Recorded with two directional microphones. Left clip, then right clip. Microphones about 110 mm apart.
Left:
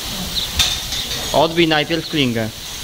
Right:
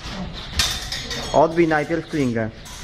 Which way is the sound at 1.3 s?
30° left (ahead or behind).